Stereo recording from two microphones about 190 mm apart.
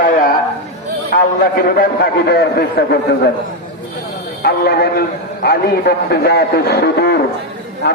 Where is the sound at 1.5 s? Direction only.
50° left (ahead or behind).